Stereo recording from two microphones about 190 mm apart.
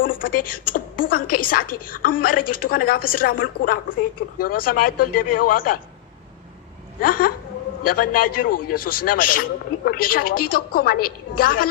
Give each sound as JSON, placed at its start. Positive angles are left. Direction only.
{"t": 0.0, "sound": "a woman's voice", "side_deg": 45}
{"t": 7.0, "sound": "a woman's voice", "side_deg": 50}